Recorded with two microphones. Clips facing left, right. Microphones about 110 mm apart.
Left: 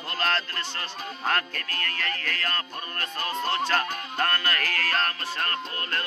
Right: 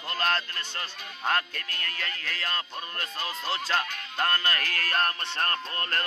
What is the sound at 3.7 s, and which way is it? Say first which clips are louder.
Music: left 2 dB; 20° right (ahead or behind).